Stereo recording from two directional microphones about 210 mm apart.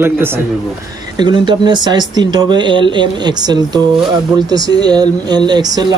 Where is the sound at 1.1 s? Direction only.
20° right (ahead or behind).